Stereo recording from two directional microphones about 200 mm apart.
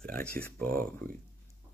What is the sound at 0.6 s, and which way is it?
Speech, 45° right (ahead or behind).